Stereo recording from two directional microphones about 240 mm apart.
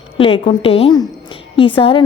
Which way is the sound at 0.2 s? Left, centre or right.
Left.